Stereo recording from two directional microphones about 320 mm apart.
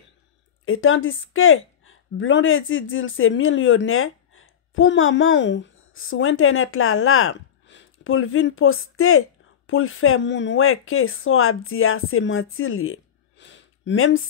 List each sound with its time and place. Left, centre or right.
0.7 s speech: left